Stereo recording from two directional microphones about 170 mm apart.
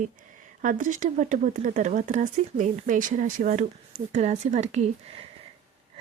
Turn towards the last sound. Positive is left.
turn(degrees=-45)  # may be behind; listen again after turning